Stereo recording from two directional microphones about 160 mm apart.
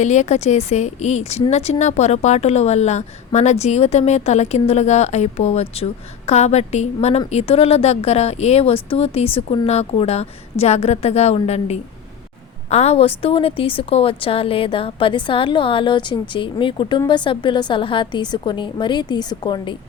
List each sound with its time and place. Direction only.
0.0 s a woman's voice: 45° left (ahead or behind); by 19.7 s 25° left (ahead or behind)